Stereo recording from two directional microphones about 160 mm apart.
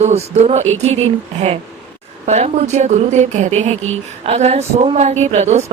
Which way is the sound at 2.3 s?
45° right (ahead or behind).